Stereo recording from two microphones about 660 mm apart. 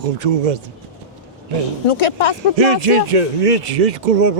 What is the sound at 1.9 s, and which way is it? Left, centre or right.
Speech, left.